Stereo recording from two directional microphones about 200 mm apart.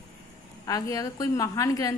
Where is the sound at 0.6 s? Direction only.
15° left (ahead or behind).